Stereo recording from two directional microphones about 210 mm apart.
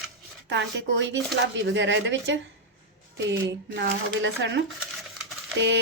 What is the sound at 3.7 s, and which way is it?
Speech, 55° right (ahead or behind).